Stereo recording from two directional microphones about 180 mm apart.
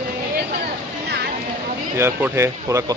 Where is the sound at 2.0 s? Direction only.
15° right (ahead or behind).